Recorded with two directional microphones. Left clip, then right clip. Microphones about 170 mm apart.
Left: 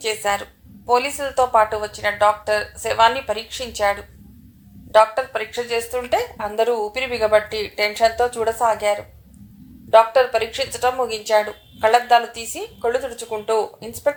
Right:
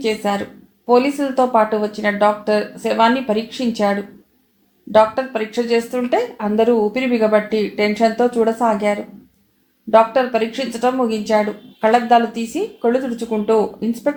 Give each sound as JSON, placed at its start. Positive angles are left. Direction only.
{"t": 0.0, "sound": "a woman's voice", "side_deg": 35}
{"t": 4.9, "sound": "a woman's voice", "side_deg": 35}